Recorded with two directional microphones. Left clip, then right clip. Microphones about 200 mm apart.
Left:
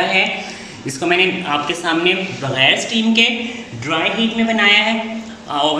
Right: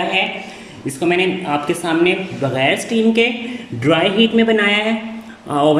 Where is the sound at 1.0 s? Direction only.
20° right (ahead or behind).